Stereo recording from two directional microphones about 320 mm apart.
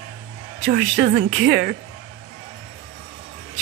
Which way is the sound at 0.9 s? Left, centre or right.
Right.